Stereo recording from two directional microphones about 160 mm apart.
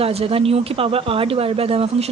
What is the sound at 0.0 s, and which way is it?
A woman's voice, 40° right (ahead or behind).